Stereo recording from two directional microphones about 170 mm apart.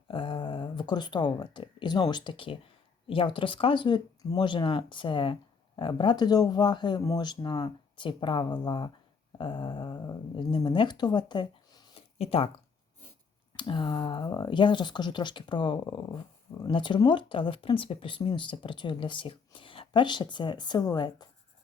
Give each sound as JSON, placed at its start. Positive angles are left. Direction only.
{"t": 0.1, "sound": "speech", "side_deg": 30}
{"t": 13.6, "sound": "speech", "side_deg": 30}